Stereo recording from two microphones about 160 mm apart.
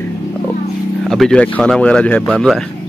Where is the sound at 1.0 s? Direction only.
Centre (ahead or behind).